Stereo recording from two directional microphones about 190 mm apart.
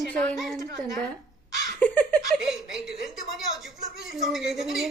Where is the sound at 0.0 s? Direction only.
5° left (ahead or behind).